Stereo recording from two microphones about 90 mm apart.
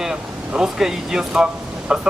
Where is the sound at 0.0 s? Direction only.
5° right (ahead or behind).